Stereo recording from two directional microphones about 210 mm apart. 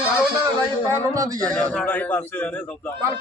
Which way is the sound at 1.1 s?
15° right (ahead or behind).